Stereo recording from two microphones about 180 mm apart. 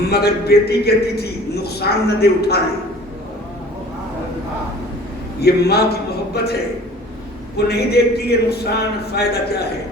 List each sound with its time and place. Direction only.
0.1 s a man's voice: 65° left (ahead or behind)
5.4 s a man's voice: 65° left (ahead or behind)